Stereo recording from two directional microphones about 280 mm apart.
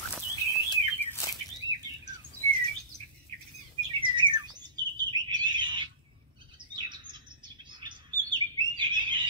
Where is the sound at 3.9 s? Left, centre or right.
Centre.